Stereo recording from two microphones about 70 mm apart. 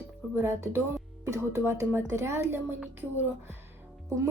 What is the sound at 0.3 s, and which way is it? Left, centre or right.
A woman's voice, right.